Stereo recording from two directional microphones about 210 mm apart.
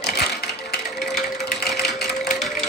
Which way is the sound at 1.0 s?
Centre (ahead or behind).